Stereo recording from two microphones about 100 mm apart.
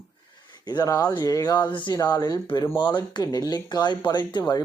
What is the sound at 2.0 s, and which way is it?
Speech, 40° left (ahead or behind).